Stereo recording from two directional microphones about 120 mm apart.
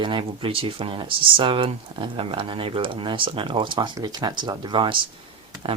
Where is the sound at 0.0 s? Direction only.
45° right (ahead or behind).